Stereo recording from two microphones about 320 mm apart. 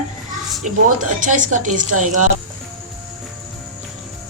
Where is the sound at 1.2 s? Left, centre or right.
Right.